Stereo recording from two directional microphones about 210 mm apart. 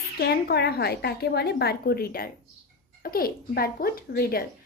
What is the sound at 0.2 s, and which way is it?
A woman's voice, 50° left (ahead or behind).